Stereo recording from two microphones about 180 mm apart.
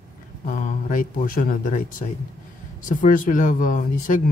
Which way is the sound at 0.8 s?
45° left (ahead or behind).